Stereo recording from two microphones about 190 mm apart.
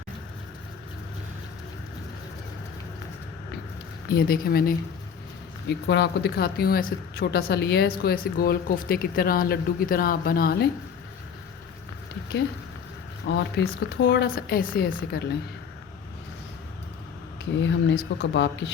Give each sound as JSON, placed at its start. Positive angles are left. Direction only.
{"t": 4.1, "sound": "speech", "side_deg": 50}
{"t": 5.6, "sound": "speech", "side_deg": 65}
{"t": 13.2, "sound": "a woman's voice", "side_deg": 65}
{"t": 17.6, "sound": "speech", "side_deg": 70}